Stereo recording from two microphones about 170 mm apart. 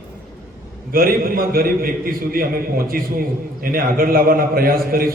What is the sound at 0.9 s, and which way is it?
A man's voice, 60° right (ahead or behind).